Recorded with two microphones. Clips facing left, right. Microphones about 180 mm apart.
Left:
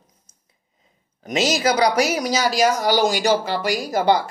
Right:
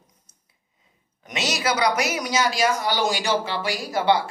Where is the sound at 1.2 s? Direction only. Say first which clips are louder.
Left 7 dB; 35° left (ahead or behind).